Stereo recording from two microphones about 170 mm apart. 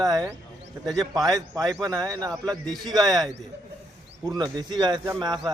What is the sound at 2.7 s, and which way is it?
Speech, 25° right (ahead or behind).